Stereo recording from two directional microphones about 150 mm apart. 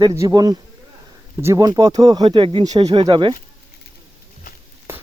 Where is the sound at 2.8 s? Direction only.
45° right (ahead or behind).